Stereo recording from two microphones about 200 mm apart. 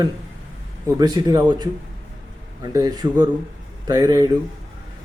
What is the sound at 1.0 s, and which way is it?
Speech, 20° right (ahead or behind).